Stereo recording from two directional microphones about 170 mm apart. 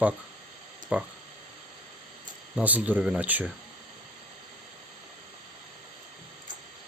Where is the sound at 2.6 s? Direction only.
10° right (ahead or behind).